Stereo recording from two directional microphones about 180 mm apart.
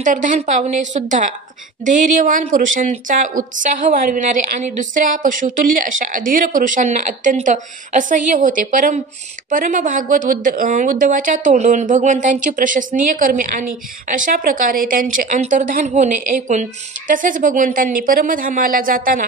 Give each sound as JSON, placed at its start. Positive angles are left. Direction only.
{"t": 0.0, "sound": "a woman's voice", "side_deg": -45}